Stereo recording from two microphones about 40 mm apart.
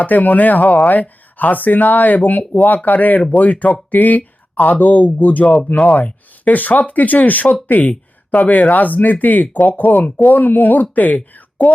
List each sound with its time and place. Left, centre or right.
0.0 s speech: left